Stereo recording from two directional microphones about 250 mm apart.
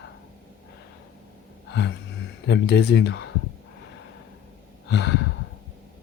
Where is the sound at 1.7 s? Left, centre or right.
Left.